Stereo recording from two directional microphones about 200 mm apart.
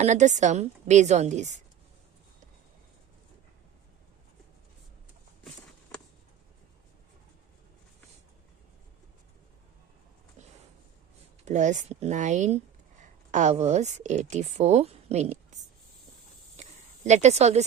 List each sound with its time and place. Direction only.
0.0 s a woman's voice: 35° right (ahead or behind)
11.4 s speech: 35° right (ahead or behind)
16.6 s a sound: 35° right (ahead or behind)